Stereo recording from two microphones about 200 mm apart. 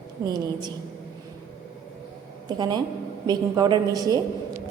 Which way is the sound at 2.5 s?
20° right (ahead or behind).